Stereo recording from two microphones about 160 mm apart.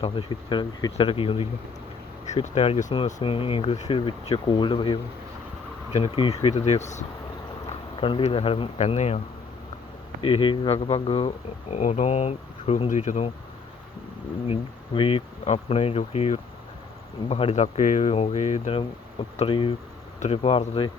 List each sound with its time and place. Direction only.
0.0 s speech: 30° left (ahead or behind)
2.2 s speech: 45° left (ahead or behind)
10.2 s speech: 30° left (ahead or behind)
11.8 s speech: 50° left (ahead or behind)
14.4 s speech: 35° left (ahead or behind)